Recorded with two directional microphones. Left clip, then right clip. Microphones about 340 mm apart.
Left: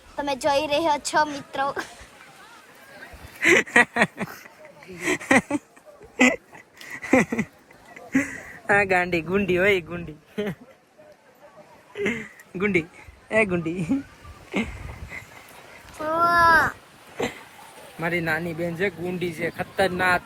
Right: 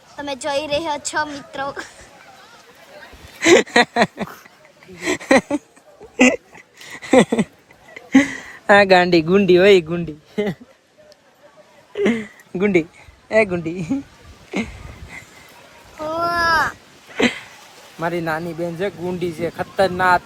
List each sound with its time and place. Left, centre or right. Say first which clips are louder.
0.2 s a woman's voice: even; centre
3.4 s speech: right 4 dB; centre
7.2 s speech: right 11 dB; centre
8.1 s speech: right 9 dB; right
11.9 s speech: right 7 dB; right
16.0 s babbling: left 1 dB; centre
17.2 s a sound: right 10 dB; right
18.0 s speech: right 3 dB; centre